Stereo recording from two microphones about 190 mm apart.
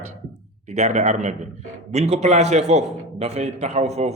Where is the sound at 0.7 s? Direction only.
40° right (ahead or behind).